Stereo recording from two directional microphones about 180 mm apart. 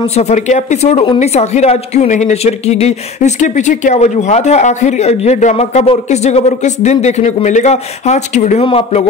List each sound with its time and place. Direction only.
0.1 s a woman's voice: 40° left (ahead or behind)